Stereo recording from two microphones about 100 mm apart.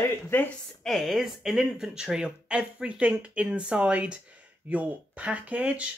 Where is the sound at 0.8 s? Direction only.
Centre (ahead or behind).